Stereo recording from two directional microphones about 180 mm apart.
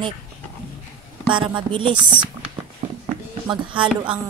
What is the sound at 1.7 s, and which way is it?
Music, 30° right (ahead or behind).